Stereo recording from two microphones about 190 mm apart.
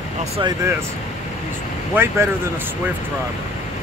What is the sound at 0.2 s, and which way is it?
Speech, 25° right (ahead or behind).